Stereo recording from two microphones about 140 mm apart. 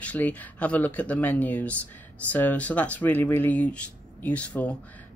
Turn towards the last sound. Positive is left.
turn(degrees=10)  # may be behind; listen again after turning